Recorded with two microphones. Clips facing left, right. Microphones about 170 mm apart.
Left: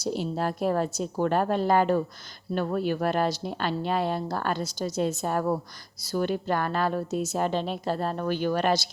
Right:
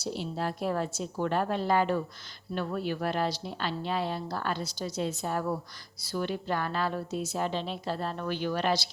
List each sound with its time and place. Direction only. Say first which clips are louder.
0.0 s a woman's voice: left 5 dB; 45° left (ahead or behind)